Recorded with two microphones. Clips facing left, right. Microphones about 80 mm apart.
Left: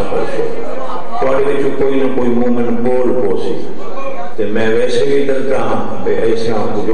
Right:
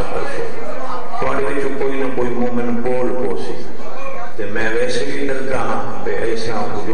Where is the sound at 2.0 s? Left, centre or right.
Centre.